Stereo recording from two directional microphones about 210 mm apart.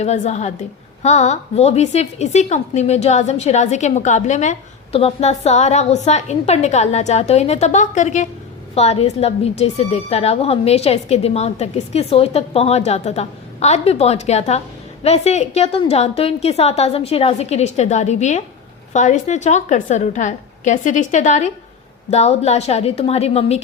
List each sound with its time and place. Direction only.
0.0 s a woman's voice: 30° left (ahead or behind)